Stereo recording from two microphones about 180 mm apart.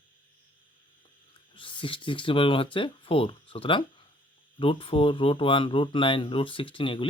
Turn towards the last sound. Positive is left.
turn(degrees=30)  # may be behind; listen again after turning